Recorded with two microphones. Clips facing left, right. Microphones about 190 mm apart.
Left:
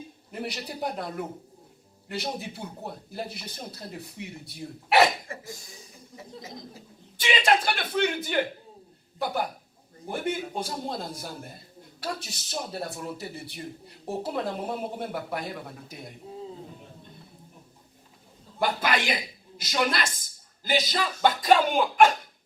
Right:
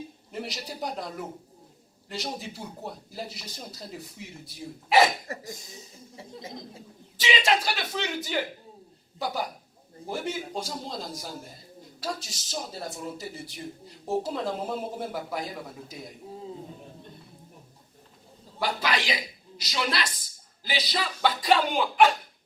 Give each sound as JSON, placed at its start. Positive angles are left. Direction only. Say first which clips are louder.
{"t": 0.4, "sound": "speech", "louder": "left 4 dB", "side_deg": 60}
{"t": 2.1, "sound": "speech", "louder": "left 2 dB", "side_deg": 60}
{"t": 5.3, "sound": "speech", "louder": "right 2 dB", "side_deg": -40}
{"t": 6.1, "sound": "speech", "louder": "right 1 dB", "side_deg": -30}
{"t": 7.2, "sound": "speech", "louder": "left 1 dB", "side_deg": 55}
{"t": 18.6, "sound": "a woman's voice", "louder": "left 2 dB", "side_deg": 50}